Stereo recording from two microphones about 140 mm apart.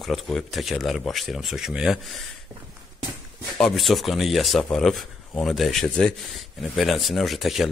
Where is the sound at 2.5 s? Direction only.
20° right (ahead or behind).